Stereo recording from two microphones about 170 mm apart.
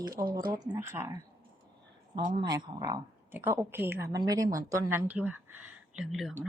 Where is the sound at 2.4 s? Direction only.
25° right (ahead or behind).